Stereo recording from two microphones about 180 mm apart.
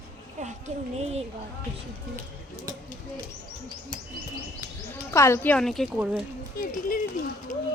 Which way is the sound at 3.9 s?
50° left (ahead or behind).